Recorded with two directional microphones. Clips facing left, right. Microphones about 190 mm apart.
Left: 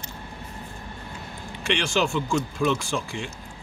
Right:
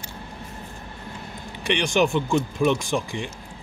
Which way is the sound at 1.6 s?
15° right (ahead or behind).